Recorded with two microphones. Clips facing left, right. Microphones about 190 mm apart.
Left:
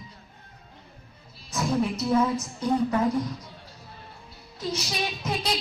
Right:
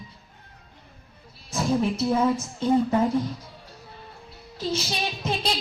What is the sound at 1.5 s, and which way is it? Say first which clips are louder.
A woman's voice: right 2 dB; 30° right (ahead or behind).